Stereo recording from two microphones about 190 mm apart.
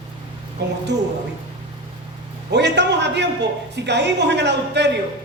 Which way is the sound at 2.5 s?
65° right (ahead or behind).